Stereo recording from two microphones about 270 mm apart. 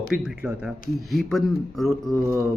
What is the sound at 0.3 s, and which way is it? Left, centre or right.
Speech, centre.